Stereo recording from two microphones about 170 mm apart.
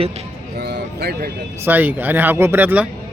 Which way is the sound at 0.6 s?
75° right (ahead or behind).